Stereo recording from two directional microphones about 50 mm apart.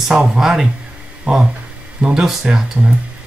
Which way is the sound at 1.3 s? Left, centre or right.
Right.